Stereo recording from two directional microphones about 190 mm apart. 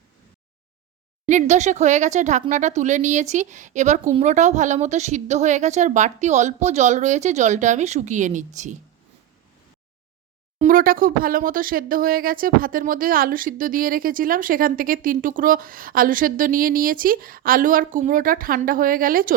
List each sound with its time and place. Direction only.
1.3 s speech: 40° right (ahead or behind)
10.6 s speech: 45° right (ahead or behind)